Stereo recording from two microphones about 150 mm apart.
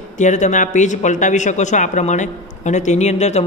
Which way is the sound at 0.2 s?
55° left (ahead or behind).